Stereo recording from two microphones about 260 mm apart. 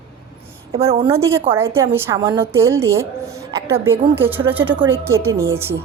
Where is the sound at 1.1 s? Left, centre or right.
Centre.